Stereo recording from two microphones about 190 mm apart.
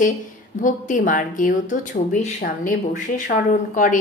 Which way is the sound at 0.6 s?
40° left (ahead or behind).